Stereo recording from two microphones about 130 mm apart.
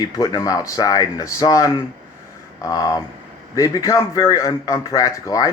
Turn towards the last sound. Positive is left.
turn(degrees=25)  # may be behind; listen again after turning